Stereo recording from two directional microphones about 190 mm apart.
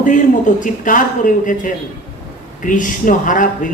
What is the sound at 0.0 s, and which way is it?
Speech, 40° left (ahead or behind).